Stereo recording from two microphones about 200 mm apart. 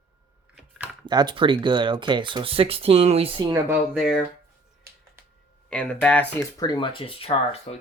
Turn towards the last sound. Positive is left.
turn(degrees=30)  # may be behind; listen again after turning